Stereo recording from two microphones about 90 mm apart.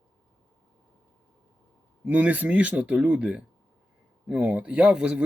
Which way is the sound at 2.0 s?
20° right (ahead or behind).